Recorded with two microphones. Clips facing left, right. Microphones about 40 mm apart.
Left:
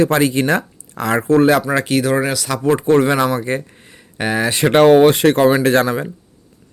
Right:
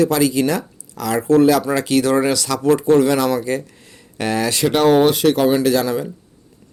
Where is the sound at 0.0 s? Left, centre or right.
Left.